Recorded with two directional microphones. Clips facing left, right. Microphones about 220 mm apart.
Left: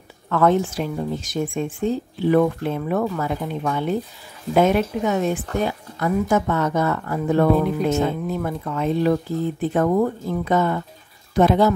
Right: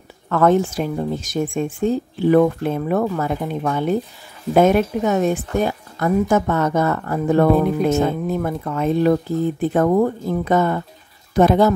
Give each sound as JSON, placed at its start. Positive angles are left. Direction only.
{"t": 0.3, "sound": "speech", "side_deg": -45}